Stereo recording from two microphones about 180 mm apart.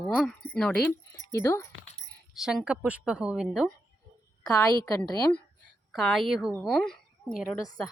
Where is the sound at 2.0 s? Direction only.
Centre (ahead or behind).